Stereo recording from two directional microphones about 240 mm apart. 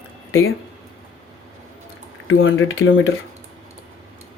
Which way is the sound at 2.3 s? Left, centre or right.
Left.